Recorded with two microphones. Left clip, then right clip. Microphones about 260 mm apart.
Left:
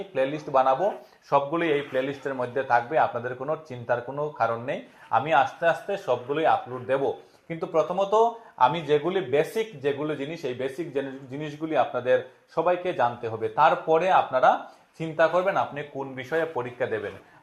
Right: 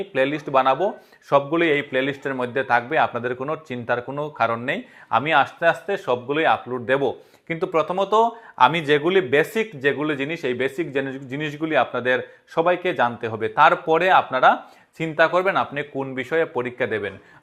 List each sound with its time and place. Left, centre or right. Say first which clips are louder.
0.1 s speech: right 4 dB; right